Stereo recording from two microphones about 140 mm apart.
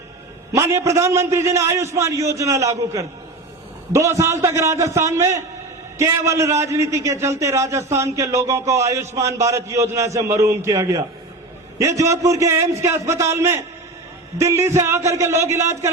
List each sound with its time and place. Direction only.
0.5 s a man's voice: 20° right (ahead or behind)
3.9 s a man's voice: 20° right (ahead or behind)